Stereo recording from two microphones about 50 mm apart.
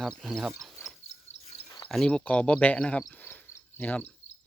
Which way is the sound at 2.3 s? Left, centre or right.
Left.